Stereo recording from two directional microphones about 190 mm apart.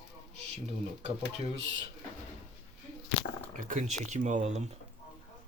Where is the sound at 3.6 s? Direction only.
40° right (ahead or behind).